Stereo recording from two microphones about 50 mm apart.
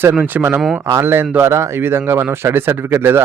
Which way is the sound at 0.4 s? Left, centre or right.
Right.